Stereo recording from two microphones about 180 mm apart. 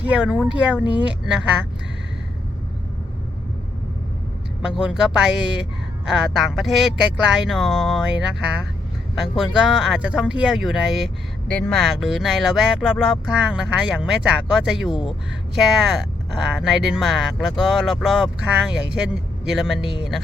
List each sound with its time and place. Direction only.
0.1 s speech: 5° right (ahead or behind)
4.6 s speech: 5° right (ahead or behind)